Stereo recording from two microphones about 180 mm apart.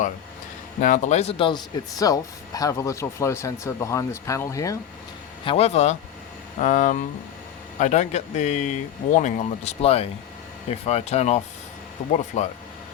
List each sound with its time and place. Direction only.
0.8 s speech: 40° left (ahead or behind); by 4.8 s 15° left (ahead or behind)
5.5 s speech: 35° left (ahead or behind)